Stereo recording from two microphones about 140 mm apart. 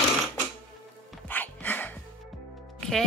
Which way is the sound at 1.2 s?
10° left (ahead or behind).